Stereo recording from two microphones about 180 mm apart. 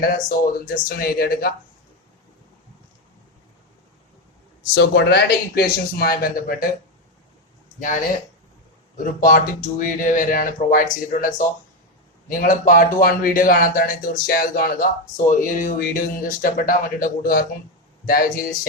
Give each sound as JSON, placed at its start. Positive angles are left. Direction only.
{"t": 0.0, "sound": "a man's voice", "side_deg": 55}
{"t": 4.7, "sound": "a man's voice", "side_deg": 70}
{"t": 9.2, "sound": "speech", "side_deg": 50}
{"t": 12.3, "sound": "speech", "side_deg": 50}